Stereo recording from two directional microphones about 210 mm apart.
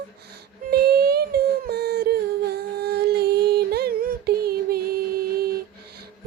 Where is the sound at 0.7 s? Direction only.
50° right (ahead or behind).